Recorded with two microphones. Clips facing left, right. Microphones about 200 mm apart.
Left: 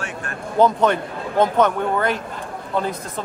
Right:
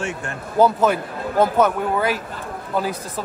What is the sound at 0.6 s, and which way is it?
Speech, 5° right (ahead or behind).